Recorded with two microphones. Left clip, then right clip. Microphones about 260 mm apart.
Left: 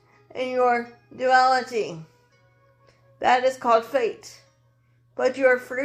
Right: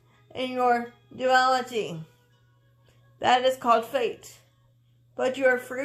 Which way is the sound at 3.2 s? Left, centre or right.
Right.